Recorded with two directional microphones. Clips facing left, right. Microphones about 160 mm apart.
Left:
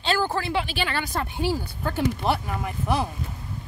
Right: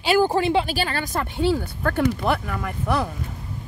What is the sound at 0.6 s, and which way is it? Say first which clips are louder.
Speech: right 2 dB; 40° right (ahead or behind).